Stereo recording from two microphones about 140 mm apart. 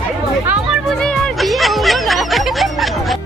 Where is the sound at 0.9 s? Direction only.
5° left (ahead or behind).